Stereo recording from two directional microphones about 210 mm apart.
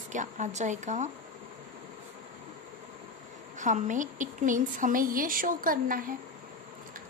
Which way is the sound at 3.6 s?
35° right (ahead or behind).